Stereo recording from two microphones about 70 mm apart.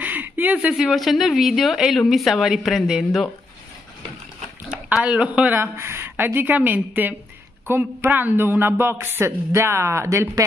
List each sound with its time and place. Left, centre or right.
0.0 s a sound: right
0.7 s a woman's voice: centre
4.9 s a woman's voice: centre
5.6 s a woman's voice: right